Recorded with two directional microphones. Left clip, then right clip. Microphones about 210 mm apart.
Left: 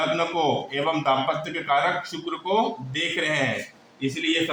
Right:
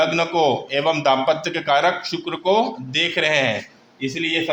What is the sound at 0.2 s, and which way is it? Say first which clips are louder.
A man's voice: right 5 dB; 45° right (ahead or behind).